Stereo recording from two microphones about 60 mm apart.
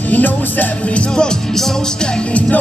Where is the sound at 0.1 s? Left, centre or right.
Left.